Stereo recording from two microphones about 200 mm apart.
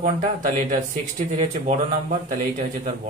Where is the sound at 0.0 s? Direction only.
35° right (ahead or behind).